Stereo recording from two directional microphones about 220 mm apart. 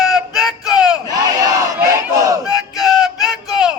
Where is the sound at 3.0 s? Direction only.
Centre (ahead or behind).